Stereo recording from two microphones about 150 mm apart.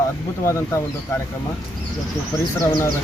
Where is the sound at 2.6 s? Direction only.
20° left (ahead or behind).